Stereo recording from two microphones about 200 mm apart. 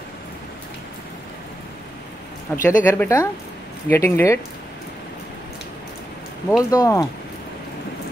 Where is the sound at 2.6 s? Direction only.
10° left (ahead or behind).